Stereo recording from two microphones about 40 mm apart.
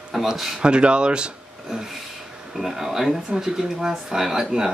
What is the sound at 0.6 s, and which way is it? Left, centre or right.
Speech, right.